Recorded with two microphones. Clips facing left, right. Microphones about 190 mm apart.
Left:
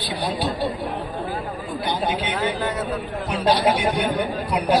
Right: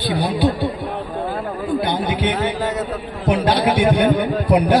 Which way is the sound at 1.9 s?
60° right (ahead or behind).